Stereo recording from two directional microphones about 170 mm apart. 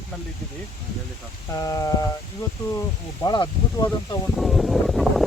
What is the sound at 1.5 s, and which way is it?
Speech, 20° left (ahead or behind).